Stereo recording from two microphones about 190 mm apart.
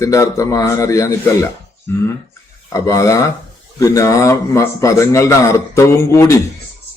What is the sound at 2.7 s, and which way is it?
A man's voice, 15° left (ahead or behind).